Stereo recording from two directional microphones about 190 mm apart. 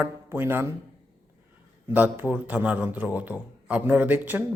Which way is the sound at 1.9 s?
10° right (ahead or behind).